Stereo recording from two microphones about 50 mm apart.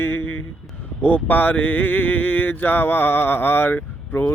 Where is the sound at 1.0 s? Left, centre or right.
Left.